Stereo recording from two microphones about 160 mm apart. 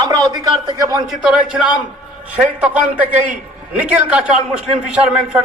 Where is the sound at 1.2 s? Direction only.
5° right (ahead or behind).